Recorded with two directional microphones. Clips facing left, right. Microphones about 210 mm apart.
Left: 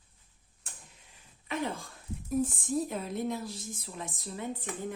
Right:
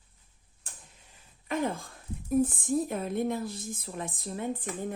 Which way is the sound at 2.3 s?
55° right (ahead or behind).